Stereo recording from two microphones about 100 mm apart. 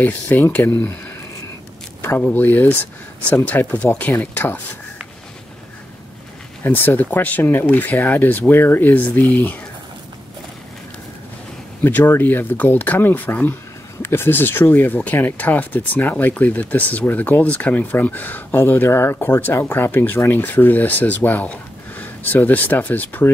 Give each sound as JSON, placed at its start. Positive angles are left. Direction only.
{"t": 0.0, "sound": "speech", "side_deg": 20}
{"t": 2.0, "sound": "speech", "side_deg": 20}
{"t": 6.6, "sound": "speech", "side_deg": 20}
{"t": 11.8, "sound": "speech", "side_deg": 20}